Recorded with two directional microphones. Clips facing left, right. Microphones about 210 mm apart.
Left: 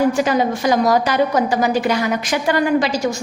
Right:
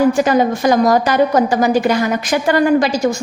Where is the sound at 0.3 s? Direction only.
50° right (ahead or behind).